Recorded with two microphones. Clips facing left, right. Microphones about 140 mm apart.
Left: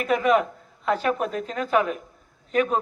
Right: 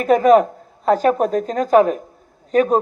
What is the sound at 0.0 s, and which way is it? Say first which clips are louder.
Speech: right 8 dB; 40° right (ahead or behind).